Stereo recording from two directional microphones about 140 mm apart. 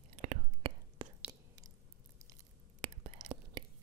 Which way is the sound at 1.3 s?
25° right (ahead or behind).